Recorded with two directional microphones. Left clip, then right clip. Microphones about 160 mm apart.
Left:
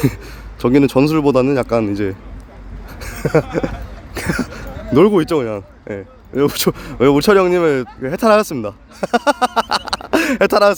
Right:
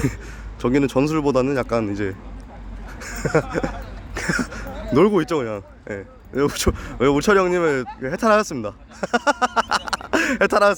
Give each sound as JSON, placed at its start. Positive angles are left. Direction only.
{"t": 0.6, "sound": "a man's voice", "side_deg": 25}